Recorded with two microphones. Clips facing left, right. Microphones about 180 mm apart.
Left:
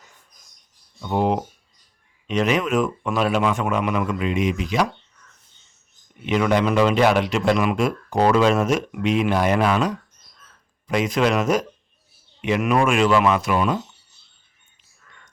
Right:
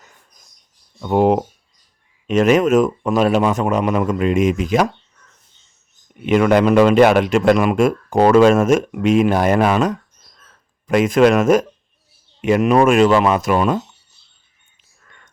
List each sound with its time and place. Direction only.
1.0 s a man's voice: 50° right (ahead or behind)
6.2 s a man's voice: 55° right (ahead or behind)